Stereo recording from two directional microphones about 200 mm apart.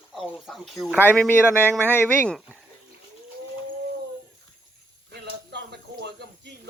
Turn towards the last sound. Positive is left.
turn(degrees=-55)  # may be behind; listen again after turning